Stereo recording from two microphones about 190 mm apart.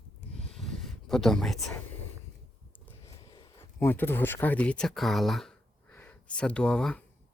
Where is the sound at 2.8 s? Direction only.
20° left (ahead or behind).